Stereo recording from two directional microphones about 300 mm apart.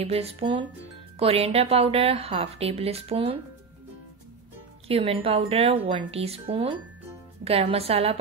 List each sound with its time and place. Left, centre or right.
0.0 s a woman's voice: centre
4.8 s a woman's voice: centre